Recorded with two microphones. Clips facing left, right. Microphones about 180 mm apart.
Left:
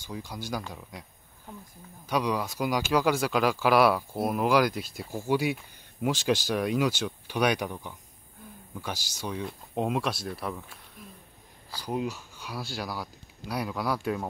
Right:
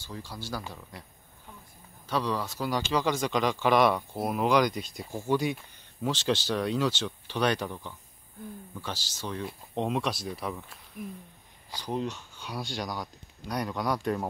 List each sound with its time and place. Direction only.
0.0 s speech: 15° left (ahead or behind)
11.8 s speech: 10° left (ahead or behind)